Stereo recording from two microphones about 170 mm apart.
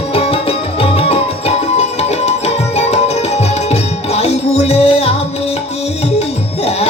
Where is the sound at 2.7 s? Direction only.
40° left (ahead or behind).